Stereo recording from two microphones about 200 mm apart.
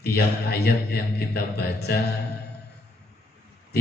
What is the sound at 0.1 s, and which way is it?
A man's voice, 50° left (ahead or behind).